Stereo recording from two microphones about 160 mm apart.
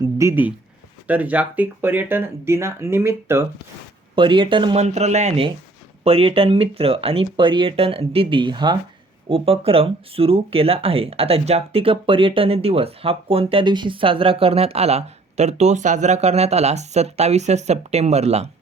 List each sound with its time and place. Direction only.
0.0 s speech: 20° right (ahead or behind)
4.1 s speech: 30° right (ahead or behind)
4.8 s speech: 45° right (ahead or behind)